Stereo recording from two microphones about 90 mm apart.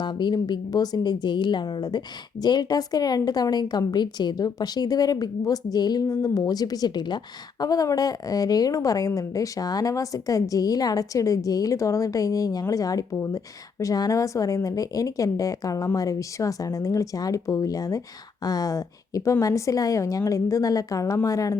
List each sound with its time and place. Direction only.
0.0 s a woman's voice: 55° left (ahead or behind)
7.6 s a woman's voice: 45° left (ahead or behind)